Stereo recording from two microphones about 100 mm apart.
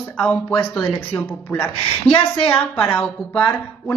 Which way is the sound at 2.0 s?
70° left (ahead or behind).